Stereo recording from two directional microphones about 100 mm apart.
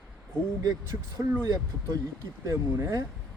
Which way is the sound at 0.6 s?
30° right (ahead or behind).